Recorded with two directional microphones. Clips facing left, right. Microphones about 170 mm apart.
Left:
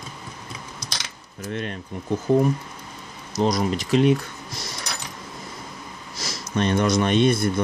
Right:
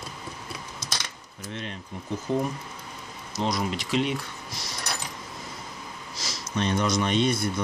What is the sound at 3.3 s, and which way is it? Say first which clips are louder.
Speech: left 6 dB; 40° left (ahead or behind).